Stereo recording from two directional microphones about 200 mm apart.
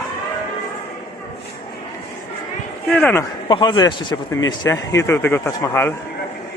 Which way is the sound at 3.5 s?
20° left (ahead or behind).